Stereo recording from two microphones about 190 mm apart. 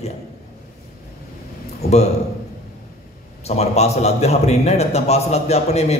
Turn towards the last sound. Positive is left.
turn(degrees=35)  # may be behind; listen again after turning